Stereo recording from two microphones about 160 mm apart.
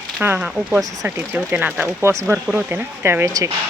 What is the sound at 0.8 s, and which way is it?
Speech, 20° right (ahead or behind).